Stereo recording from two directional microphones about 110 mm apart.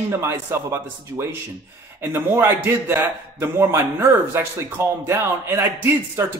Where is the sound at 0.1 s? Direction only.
25° right (ahead or behind).